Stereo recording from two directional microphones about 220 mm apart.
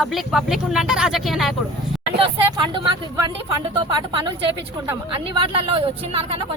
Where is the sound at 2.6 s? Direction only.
20° right (ahead or behind).